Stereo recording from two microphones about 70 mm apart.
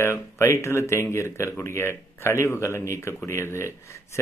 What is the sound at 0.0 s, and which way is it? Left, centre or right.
A man's voice, left.